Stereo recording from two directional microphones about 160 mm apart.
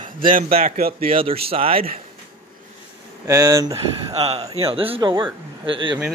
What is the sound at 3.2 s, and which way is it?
Speech, 20° right (ahead or behind).